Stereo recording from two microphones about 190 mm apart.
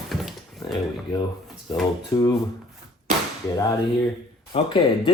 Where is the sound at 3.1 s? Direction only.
45° right (ahead or behind).